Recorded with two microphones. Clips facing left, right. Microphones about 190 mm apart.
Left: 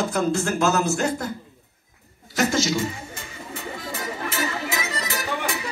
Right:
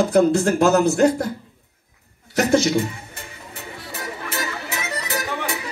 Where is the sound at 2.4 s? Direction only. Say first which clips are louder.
Right 5 dB; 60° right (ahead or behind).